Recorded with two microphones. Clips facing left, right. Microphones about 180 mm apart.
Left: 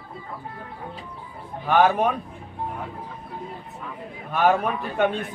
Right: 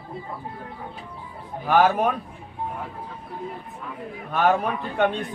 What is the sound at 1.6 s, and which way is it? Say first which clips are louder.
Speech: even; centre (ahead or behind).